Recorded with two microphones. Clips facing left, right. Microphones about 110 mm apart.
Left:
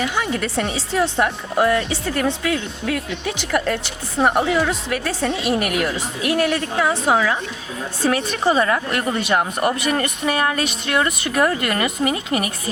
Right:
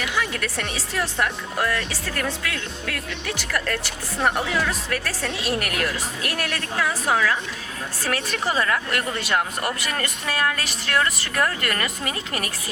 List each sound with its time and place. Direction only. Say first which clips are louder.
0.0 s speech: left 4 dB; 25° left (ahead or behind)